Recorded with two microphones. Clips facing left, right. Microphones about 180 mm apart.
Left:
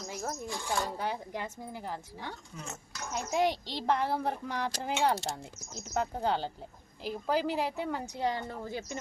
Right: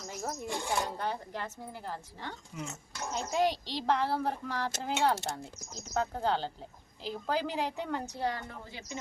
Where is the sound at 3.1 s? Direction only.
10° left (ahead or behind).